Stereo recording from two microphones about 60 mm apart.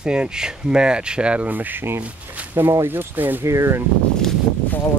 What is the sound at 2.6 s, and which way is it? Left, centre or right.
Speech, right.